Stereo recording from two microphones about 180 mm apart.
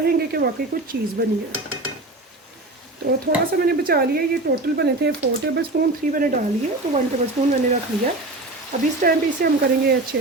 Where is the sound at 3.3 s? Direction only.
60° right (ahead or behind).